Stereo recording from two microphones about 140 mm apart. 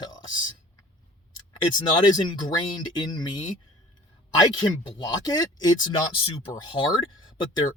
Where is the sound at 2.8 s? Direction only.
30° left (ahead or behind).